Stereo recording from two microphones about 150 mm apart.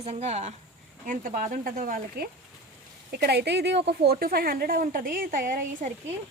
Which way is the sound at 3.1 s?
90° right.